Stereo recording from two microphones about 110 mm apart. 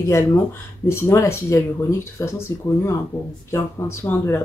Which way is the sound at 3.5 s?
25° left (ahead or behind).